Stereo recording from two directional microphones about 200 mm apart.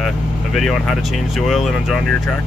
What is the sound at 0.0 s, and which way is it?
Speech, centre (ahead or behind).